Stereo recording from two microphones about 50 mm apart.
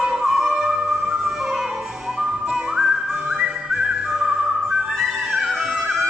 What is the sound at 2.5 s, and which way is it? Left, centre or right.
Whistling, centre.